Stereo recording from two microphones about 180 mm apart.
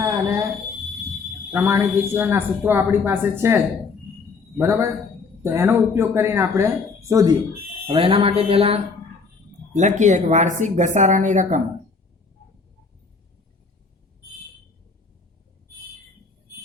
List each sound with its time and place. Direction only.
1.5 s a woman's voice: 15° right (ahead or behind)
7.9 s speech: 30° right (ahead or behind)